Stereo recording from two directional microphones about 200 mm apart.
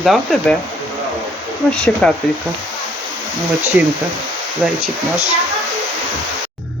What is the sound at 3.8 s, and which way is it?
Speech, 10° right (ahead or behind).